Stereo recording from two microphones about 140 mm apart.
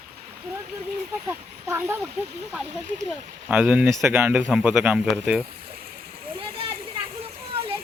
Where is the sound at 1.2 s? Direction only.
15° right (ahead or behind).